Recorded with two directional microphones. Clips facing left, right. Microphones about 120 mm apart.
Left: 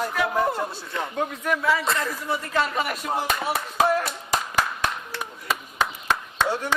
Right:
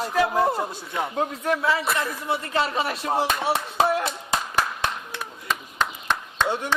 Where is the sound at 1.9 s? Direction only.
15° right (ahead or behind).